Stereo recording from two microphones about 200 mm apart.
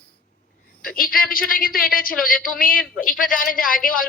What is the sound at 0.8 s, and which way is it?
Speech, 45° left (ahead or behind).